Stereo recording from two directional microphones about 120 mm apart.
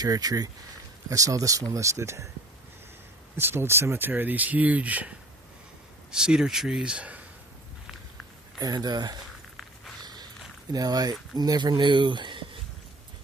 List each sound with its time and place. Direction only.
0.0 s speech: 30° right (ahead or behind)
3.3 s speech: 20° right (ahead or behind)
8.5 s speech: 35° right (ahead or behind)
10.0 s a sound: 35° right (ahead or behind)
10.7 s speech: 35° right (ahead or behind)